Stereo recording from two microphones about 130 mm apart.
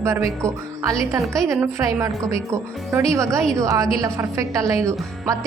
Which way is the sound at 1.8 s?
20° right (ahead or behind).